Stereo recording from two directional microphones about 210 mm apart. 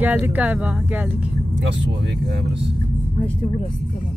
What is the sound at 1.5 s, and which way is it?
Vehicle, 60° right (ahead or behind).